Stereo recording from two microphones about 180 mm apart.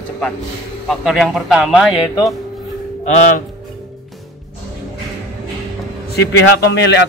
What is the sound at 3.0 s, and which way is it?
Speech, 45° left (ahead or behind).